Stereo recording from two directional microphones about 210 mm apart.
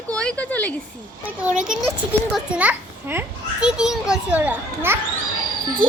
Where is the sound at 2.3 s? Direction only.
5° right (ahead or behind).